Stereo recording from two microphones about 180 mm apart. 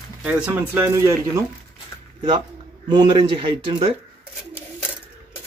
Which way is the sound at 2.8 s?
25° right (ahead or behind).